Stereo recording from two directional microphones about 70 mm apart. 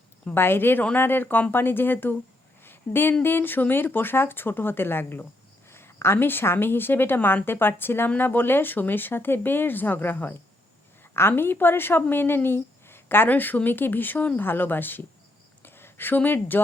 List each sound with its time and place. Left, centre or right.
0.3 s speech: left
2.6 s a sound: left
3.2 s speech: left